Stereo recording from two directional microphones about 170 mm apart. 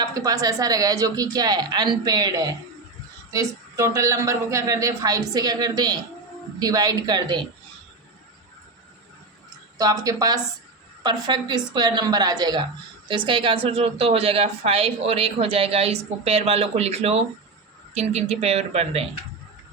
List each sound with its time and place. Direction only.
0.0 s speech: 20° right (ahead or behind)
9.7 s speech: 20° right (ahead or behind); by 19.0 s 40° right (ahead or behind)